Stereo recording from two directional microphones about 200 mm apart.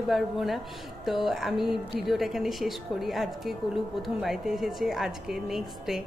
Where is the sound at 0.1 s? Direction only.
Centre (ahead or behind).